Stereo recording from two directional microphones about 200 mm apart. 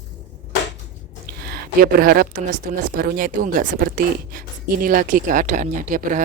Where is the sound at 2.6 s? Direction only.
45° right (ahead or behind).